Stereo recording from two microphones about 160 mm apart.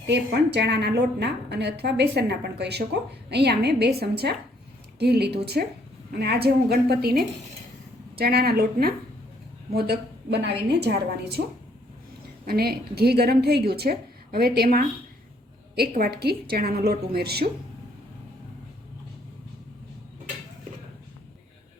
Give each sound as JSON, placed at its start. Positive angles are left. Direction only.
{"t": 0.5, "sound": "a woman's voice", "side_deg": -90}
{"t": 9.7, "sound": "a woman's voice", "side_deg": -85}
{"t": 12.5, "sound": "a woman's voice", "side_deg": -75}
{"t": 15.7, "sound": "a woman's voice", "side_deg": -80}